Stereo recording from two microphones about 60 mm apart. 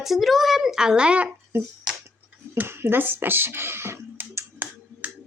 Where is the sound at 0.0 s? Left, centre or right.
Centre.